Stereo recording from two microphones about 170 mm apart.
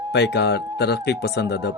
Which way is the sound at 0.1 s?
75° left (ahead or behind).